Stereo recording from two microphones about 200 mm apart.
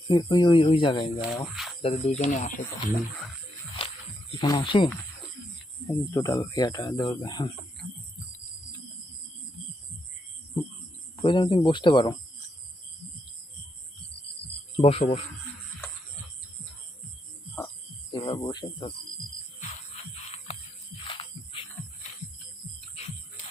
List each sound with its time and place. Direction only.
0.1 s speech: 20° left (ahead or behind); by 2.9 s 40° left (ahead or behind)
3.8 s a sound: 25° left (ahead or behind)
4.4 s speech: 20° left (ahead or behind)
5.9 s speech: 15° left (ahead or behind)
11.2 s speech: 25° left (ahead or behind)
14.8 s speech: 30° left (ahead or behind)
18.1 s speech: 25° left (ahead or behind)
21.1 s music: 25° left (ahead or behind)